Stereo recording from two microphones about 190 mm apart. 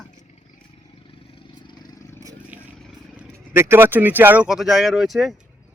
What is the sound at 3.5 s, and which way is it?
Speech, 10° right (ahead or behind).